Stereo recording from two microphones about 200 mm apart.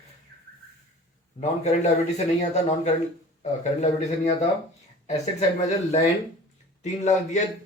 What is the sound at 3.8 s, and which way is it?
Speech, 35° left (ahead or behind).